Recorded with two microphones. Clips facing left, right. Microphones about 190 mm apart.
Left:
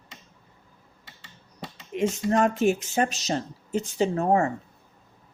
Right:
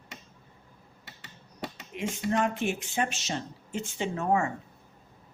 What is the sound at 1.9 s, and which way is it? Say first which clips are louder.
Speech: left 6 dB; 40° left (ahead or behind).